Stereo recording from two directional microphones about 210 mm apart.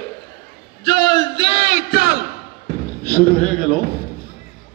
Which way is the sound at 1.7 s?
45° left (ahead or behind).